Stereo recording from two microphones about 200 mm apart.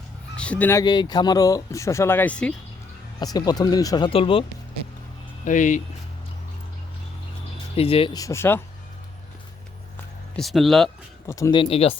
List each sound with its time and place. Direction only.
0.3 s speech: 5° left (ahead or behind)
3.3 s speech: 20° left (ahead or behind)
5.5 s speech: 40° left (ahead or behind)
7.8 s speech: 30° left (ahead or behind); by 8.6 s 10° left (ahead or behind)
10.3 s speech: centre (ahead or behind)
11.3 s speech: 15° left (ahead or behind)